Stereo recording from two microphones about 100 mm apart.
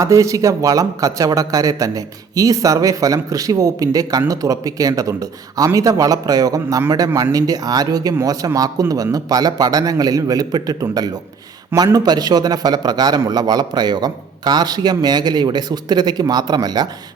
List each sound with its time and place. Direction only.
0.0 s a man's voice: 30° right (ahead or behind)